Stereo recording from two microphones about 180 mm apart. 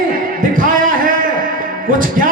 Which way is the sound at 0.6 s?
50° right (ahead or behind).